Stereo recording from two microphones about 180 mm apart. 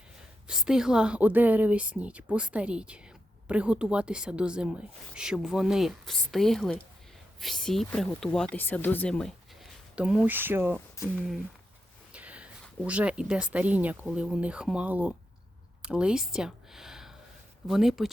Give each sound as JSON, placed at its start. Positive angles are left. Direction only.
{"t": 0.4, "sound": "a woman's voice", "side_deg": -5}
{"t": 9.9, "sound": "a woman's voice", "side_deg": -5}
{"t": 11.0, "sound": "speech", "side_deg": 15}
{"t": 12.1, "sound": "speech", "side_deg": -5}